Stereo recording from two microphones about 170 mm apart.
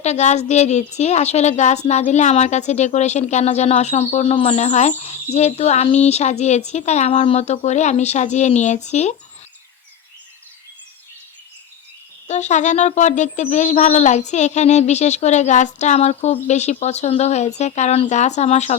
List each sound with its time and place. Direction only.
0.0 s a woman's voice: 40° left (ahead or behind)
12.3 s speech: 45° left (ahead or behind)